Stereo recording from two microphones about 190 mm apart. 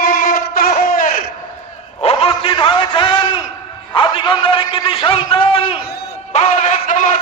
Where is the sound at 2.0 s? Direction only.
30° left (ahead or behind).